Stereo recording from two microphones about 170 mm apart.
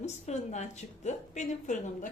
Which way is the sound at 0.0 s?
40° left (ahead or behind).